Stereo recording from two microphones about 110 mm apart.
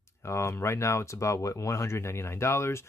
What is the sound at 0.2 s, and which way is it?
Speech, 25° left (ahead or behind).